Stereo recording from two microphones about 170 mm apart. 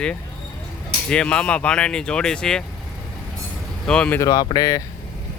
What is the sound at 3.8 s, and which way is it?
Speech, 5° left (ahead or behind).